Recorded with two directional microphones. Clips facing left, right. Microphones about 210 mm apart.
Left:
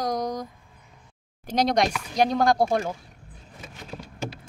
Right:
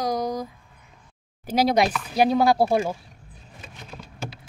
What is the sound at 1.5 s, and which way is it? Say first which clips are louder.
A woman's voice: right 2 dB; 5° right (ahead or behind).